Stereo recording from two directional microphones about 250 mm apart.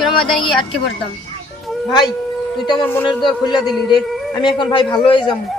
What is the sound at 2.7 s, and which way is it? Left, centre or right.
A man's voice, centre.